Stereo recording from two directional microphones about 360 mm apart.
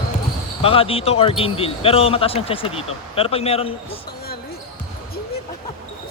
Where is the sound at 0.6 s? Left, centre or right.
Centre.